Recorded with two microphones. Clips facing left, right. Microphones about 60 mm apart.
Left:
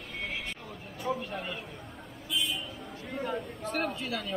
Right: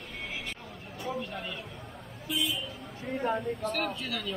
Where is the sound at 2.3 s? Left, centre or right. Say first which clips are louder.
Right 1 dB; right.